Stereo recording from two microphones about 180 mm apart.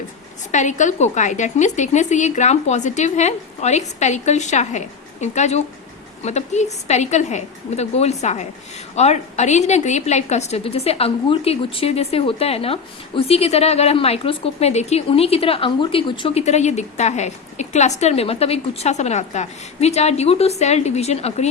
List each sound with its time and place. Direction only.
0.5 s a woman's voice: 40° left (ahead or behind)